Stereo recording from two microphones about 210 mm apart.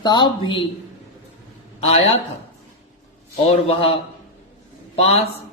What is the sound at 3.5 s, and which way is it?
Speech, 25° left (ahead or behind).